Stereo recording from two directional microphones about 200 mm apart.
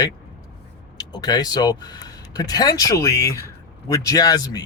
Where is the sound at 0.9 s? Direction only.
20° left (ahead or behind).